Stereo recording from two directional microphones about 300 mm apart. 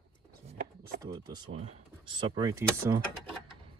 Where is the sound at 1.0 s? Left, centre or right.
Centre.